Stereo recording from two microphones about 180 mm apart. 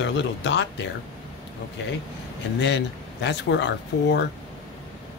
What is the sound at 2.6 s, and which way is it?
Speech, 75° left (ahead or behind).